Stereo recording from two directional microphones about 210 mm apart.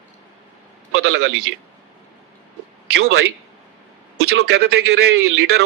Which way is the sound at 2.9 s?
50° right (ahead or behind).